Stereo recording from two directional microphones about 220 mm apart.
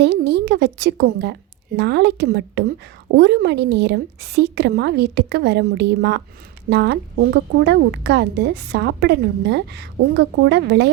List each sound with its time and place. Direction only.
0.0 s a woman's voice: 50° right (ahead or behind)